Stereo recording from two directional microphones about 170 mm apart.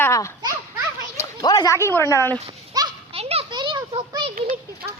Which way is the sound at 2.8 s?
20° right (ahead or behind).